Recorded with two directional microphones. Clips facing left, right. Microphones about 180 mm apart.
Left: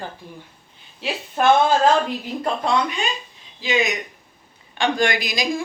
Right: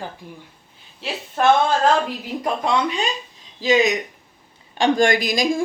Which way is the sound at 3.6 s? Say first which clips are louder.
Right 5 dB; 40° right (ahead or behind).